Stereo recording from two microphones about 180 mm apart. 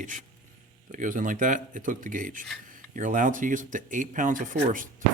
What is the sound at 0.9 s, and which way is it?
Speech, 45° right (ahead or behind).